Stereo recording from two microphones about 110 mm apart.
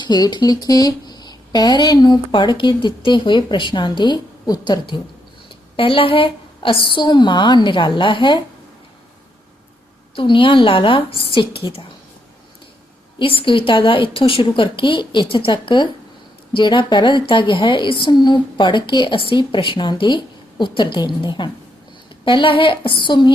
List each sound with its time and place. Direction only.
0.0 s speech: 40° left (ahead or behind)
5.7 s a woman's voice: 55° left (ahead or behind)
10.2 s a woman's voice: 50° left (ahead or behind)
13.1 s a woman's voice: 50° left (ahead or behind)